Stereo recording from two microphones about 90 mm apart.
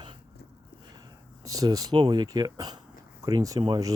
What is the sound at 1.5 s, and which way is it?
Speech, 40° right (ahead or behind).